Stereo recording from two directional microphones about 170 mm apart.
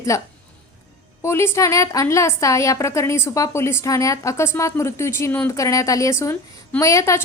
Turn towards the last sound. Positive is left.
turn(degrees=20)  # may be behind; listen again after turning